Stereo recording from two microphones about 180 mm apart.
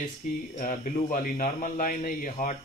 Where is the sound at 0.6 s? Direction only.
50° left (ahead or behind).